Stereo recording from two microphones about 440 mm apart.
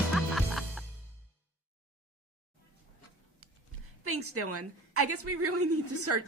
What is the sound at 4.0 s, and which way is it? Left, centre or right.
A woman's voice, right.